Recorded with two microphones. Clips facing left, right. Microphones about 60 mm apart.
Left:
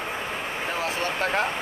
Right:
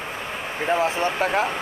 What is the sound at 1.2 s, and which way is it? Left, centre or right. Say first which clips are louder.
Speech: right 2 dB; centre.